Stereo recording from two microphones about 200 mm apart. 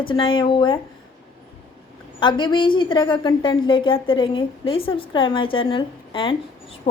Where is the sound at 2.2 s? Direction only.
25° left (ahead or behind).